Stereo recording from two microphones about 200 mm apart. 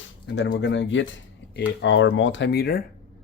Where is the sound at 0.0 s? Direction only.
60° left (ahead or behind).